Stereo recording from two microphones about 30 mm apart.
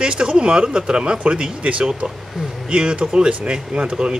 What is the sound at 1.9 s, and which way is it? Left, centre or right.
A man's voice, right.